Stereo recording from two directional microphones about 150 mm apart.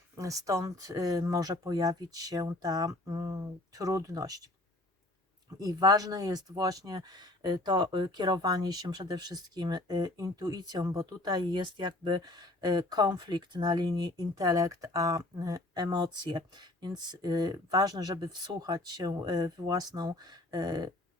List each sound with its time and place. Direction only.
0.2 s speech: 20° right (ahead or behind)
5.5 s speech: 25° right (ahead or behind)